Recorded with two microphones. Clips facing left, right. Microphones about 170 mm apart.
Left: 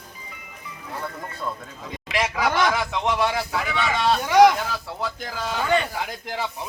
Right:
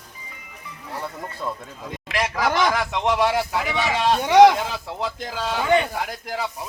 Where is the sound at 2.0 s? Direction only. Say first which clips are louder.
Even; centre (ahead or behind).